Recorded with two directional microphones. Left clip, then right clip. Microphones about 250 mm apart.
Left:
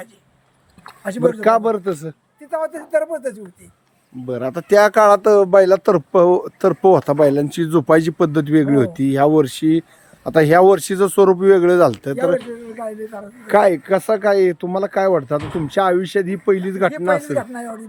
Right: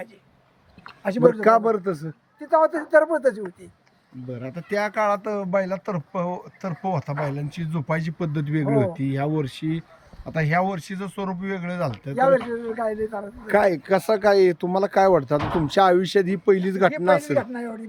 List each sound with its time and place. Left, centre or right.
1.0 s speech: centre
2.5 s speech: centre
4.3 s speech: centre
12.1 s a man's voice: centre
13.5 s speech: centre